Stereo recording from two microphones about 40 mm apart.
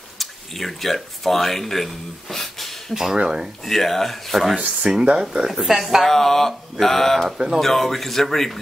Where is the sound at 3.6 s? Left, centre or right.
Centre.